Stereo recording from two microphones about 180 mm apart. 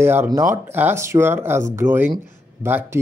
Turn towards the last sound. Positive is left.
turn(degrees=-15)  # may be behind; listen again after turning